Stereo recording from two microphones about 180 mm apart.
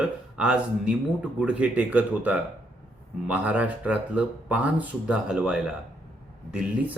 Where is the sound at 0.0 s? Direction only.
5° right (ahead or behind).